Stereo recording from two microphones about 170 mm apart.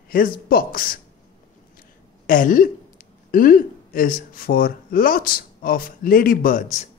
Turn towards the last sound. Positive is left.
turn(degrees=50)  # may be behind; listen again after turning